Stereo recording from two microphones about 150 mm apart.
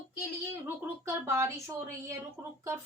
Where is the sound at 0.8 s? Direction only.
15° right (ahead or behind).